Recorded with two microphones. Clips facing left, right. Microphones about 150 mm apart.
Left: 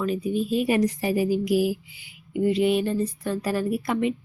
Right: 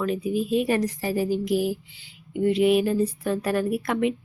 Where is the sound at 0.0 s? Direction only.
Centre (ahead or behind).